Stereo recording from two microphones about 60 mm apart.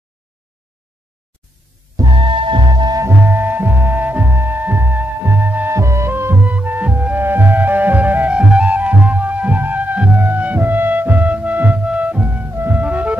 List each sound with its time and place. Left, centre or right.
2.0 s music: right
3.1 s music: right
5.7 s music: right
7.2 s music: right